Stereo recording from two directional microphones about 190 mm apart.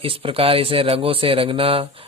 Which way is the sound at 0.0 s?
30° right (ahead or behind).